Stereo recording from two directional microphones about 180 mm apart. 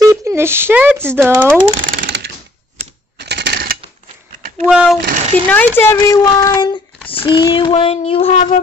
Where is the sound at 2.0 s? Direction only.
70° right (ahead or behind).